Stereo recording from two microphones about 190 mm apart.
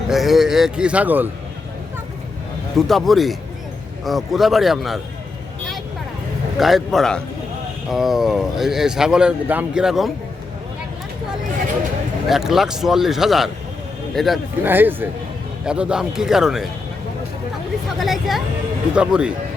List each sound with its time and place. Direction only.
0.1 s speech: centre (ahead or behind)
2.7 s speech: centre (ahead or behind)
6.6 s speech: centre (ahead or behind)
12.3 s speech: centre (ahead or behind)
14.6 s a man's voice: 10° right (ahead or behind)
18.0 s speech: centre (ahead or behind)